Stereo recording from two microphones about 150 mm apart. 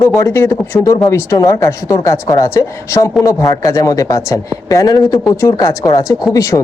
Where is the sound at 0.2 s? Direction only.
15° left (ahead or behind).